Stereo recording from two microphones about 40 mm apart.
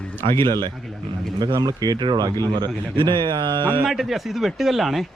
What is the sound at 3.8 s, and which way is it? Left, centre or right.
A man's voice, centre.